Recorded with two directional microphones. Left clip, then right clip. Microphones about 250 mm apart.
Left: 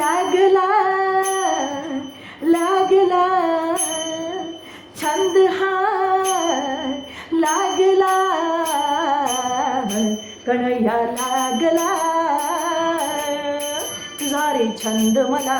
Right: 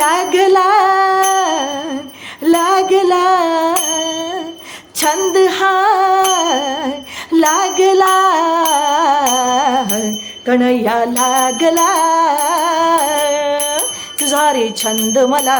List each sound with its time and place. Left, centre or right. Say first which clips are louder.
0.0 s music: right 4 dB; right
2.5 s music: right 5 dB; right
4.9 s music: right 4 dB; right
10.4 s jingle bell: right 6 dB; right
11.3 s music: right 4 dB; right
14.3 s speech: right 6 dB; right